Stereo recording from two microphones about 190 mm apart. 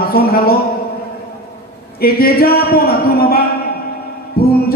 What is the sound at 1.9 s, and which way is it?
A man's voice, 55° left (ahead or behind).